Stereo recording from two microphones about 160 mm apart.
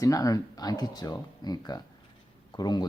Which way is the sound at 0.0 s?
20° left (ahead or behind).